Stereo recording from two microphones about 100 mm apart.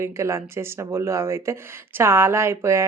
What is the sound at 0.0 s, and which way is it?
Speech, 30° right (ahead or behind).